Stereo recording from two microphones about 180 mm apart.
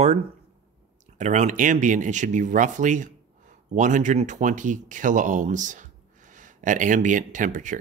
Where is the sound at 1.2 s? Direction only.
40° right (ahead or behind).